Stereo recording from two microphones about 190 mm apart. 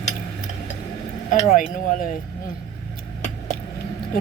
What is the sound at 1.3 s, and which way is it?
Speech, 45° left (ahead or behind).